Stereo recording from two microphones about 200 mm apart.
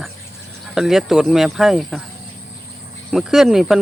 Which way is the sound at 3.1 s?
Centre (ahead or behind).